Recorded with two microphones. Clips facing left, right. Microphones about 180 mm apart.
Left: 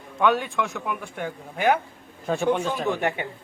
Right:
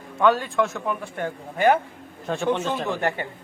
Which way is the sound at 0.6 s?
15° left (ahead or behind).